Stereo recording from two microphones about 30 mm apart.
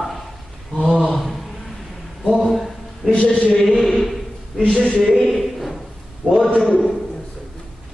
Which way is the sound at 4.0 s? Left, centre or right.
Centre.